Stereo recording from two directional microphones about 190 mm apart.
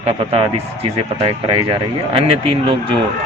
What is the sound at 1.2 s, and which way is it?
Speech, 30° right (ahead or behind).